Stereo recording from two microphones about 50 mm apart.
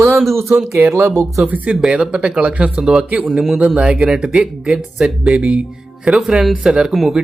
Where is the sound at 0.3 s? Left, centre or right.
Right.